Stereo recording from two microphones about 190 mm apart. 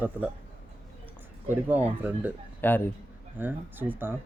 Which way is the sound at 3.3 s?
10° right (ahead or behind).